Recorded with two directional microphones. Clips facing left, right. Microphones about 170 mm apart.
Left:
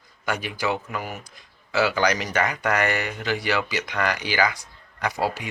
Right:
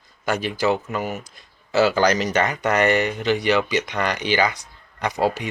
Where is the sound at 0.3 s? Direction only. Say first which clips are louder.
Right 5 dB; 25° right (ahead or behind).